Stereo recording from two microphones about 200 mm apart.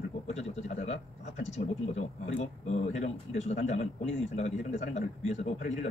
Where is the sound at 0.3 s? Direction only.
35° left (ahead or behind).